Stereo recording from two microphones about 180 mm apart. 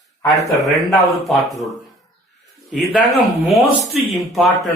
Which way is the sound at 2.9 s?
Centre (ahead or behind).